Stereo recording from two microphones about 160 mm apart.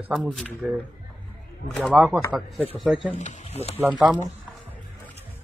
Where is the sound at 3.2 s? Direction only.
50° left (ahead or behind).